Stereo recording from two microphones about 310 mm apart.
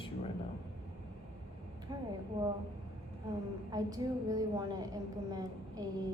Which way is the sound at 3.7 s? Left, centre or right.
Centre.